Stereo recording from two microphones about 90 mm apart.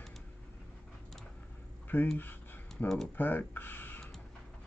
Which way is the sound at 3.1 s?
20° left (ahead or behind).